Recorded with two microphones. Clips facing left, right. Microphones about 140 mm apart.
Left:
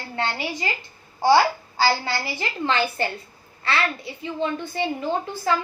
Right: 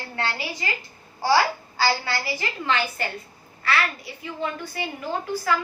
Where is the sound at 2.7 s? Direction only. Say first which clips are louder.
Left 2 dB; 30° left (ahead or behind).